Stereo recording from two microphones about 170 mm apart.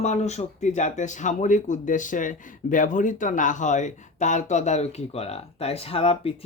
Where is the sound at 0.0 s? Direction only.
40° left (ahead or behind).